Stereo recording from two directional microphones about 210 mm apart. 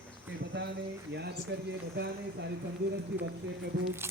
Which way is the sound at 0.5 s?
55° right (ahead or behind).